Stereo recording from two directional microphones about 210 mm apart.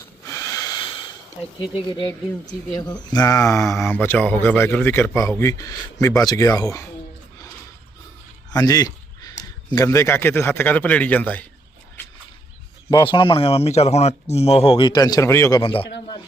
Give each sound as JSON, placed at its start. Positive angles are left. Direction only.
{"t": 0.3, "sound": "wheeze", "side_deg": 15}
{"t": 1.7, "sound": "speech", "side_deg": 25}
{"t": 8.4, "sound": "a sound", "side_deg": 20}
{"t": 9.7, "sound": "speech", "side_deg": 15}
{"t": 12.9, "sound": "speech", "side_deg": 20}